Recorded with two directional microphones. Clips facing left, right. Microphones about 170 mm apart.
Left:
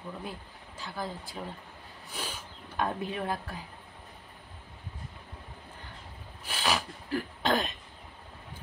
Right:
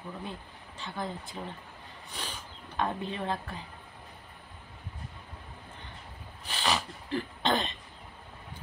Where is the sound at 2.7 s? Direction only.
5° left (ahead or behind).